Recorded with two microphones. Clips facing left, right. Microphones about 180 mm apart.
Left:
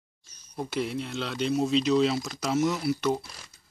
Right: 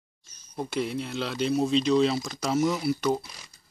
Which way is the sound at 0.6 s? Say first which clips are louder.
Right 1 dB; centre (ahead or behind).